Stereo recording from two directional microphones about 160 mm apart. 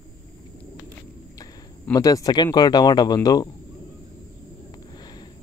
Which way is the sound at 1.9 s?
20° left (ahead or behind).